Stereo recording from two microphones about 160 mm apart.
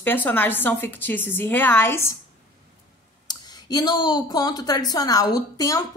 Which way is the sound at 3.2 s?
25° left (ahead or behind).